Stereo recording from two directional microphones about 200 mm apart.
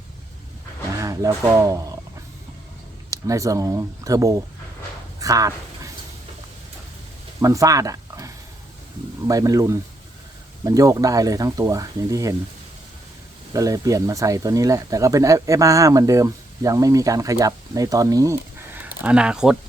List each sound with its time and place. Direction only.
0.9 s speech: 15° right (ahead or behind)
3.1 s speech: 15° right (ahead or behind)
5.2 s a sound: 15° right (ahead or behind)
7.4 s speech: 15° right (ahead or behind)
13.5 s speech: 15° right (ahead or behind)